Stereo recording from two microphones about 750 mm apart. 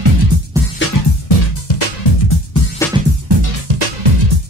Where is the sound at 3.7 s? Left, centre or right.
Right.